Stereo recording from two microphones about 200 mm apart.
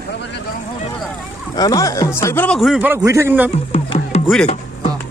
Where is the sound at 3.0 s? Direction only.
15° right (ahead or behind).